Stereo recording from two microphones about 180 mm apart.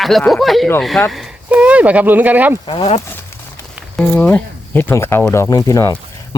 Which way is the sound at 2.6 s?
30° left (ahead or behind).